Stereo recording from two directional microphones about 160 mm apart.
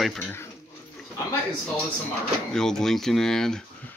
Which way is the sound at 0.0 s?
5° left (ahead or behind).